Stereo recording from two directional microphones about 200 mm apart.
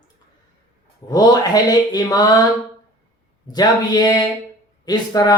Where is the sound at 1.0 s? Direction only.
20° left (ahead or behind).